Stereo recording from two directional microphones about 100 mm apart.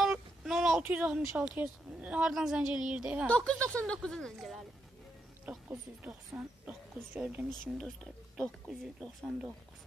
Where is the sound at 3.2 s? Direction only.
15° left (ahead or behind).